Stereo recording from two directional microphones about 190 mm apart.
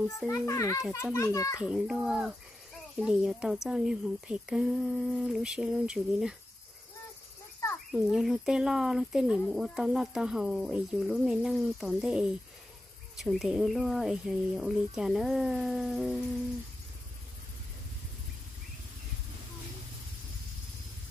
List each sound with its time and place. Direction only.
0.3 s a child's voice: 15° left (ahead or behind)
1.6 s a woman's voice: 5° right (ahead or behind)
7.9 s a woman's voice: centre (ahead or behind)